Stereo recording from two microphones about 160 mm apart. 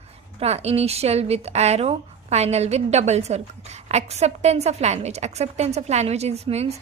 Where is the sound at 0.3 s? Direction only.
40° right (ahead or behind).